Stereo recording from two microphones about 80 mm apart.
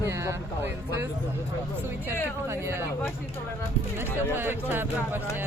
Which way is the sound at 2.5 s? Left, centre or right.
Right.